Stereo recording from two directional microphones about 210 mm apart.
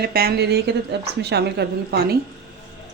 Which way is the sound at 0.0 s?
45° right (ahead or behind).